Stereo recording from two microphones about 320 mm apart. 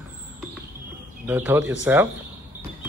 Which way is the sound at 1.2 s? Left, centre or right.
Centre.